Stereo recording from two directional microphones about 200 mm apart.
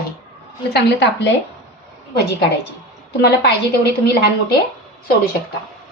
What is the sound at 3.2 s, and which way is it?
Speech, 55° left (ahead or behind).